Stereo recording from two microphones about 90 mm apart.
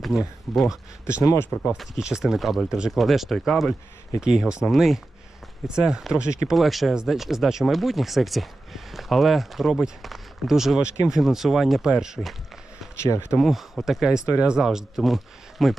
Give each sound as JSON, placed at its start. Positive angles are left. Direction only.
{"t": 0.0, "sound": "speech", "side_deg": -5}
{"t": 13.0, "sound": "speech", "side_deg": 35}
{"t": 13.3, "sound": "speech", "side_deg": 0}